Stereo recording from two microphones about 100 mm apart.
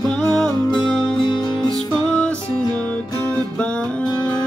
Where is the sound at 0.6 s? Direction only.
50° left (ahead or behind).